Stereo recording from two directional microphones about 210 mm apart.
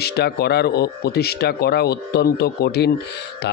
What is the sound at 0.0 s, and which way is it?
A man's voice, 50° left (ahead or behind).